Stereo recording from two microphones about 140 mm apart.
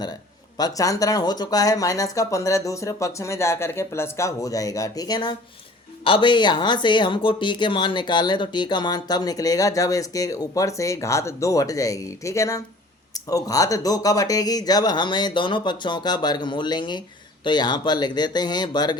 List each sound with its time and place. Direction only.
0.5 s speech: 25° left (ahead or behind)